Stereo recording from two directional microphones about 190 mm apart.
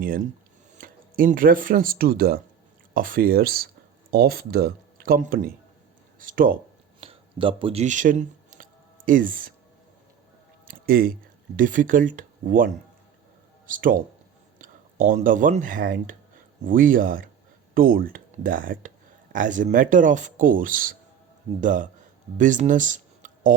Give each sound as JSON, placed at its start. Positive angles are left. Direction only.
{"t": 0.8, "sound": "speech", "side_deg": -45}
{"t": 7.0, "sound": "a sound", "side_deg": -30}
{"t": 10.7, "sound": "speech", "side_deg": -50}